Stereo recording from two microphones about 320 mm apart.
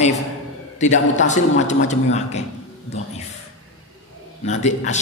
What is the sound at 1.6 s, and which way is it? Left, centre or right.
Speech, left.